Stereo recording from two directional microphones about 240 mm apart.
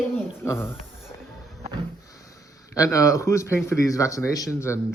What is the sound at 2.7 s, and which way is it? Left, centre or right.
Speech, centre.